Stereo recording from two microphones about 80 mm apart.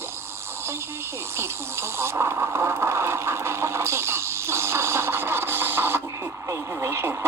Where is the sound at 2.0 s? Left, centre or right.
Right.